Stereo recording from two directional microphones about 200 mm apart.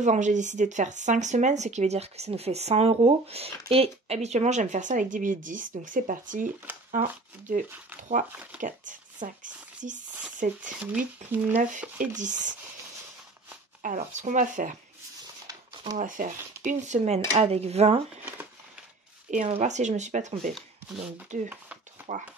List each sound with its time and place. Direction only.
0.0 s speech: 35° right (ahead or behind)
8.3 s speech: 5° right (ahead or behind)
8.5 s speech: 40° right (ahead or behind)
11.8 s speech: 5° right (ahead or behind)
12.2 s speech: 40° right (ahead or behind)
13.8 s speech: 35° right (ahead or behind)
15.4 s a sound: 20° right (ahead or behind)
16.0 s speech: 40° right (ahead or behind)
19.3 s speech: 35° right (ahead or behind)